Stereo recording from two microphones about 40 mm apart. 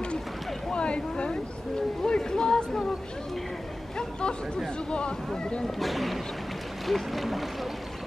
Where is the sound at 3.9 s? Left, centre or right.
Left.